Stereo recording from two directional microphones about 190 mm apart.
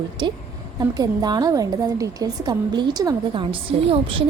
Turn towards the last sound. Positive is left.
turn(degrees=-30)  # may be behind; listen again after turning